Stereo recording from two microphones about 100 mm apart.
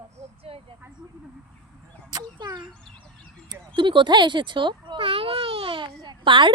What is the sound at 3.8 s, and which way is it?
Speech, 55° right (ahead or behind).